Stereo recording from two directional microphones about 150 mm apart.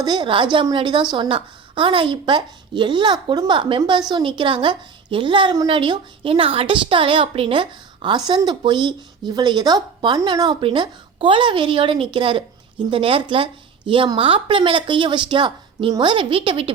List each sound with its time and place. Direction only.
0.0 s a woman's voice: 30° right (ahead or behind)